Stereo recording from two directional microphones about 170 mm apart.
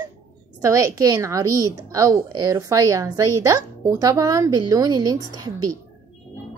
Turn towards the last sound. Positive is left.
turn(degrees=-20)  # may be behind; listen again after turning